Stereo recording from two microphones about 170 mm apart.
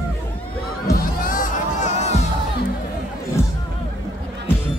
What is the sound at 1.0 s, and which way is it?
Music, 55° left (ahead or behind).